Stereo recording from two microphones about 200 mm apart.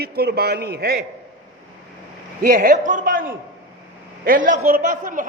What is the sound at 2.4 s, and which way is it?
A man's voice, 45° right (ahead or behind).